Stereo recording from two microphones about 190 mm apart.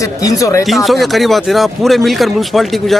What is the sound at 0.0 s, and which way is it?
Speech, 15° left (ahead or behind).